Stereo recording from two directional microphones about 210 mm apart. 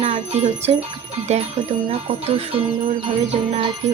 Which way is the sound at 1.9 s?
25° right (ahead or behind).